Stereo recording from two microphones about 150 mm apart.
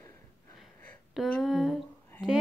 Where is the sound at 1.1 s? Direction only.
Centre (ahead or behind).